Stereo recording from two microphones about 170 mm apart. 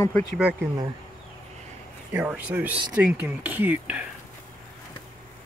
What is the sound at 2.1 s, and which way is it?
Speech, 10° right (ahead or behind).